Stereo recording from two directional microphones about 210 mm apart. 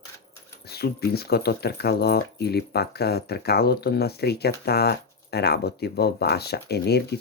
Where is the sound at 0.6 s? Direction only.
50° left (ahead or behind).